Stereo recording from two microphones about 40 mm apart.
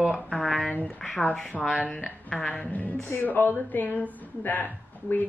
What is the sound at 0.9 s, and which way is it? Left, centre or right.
Speech, centre.